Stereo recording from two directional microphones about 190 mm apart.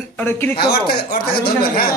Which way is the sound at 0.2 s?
10° left (ahead or behind).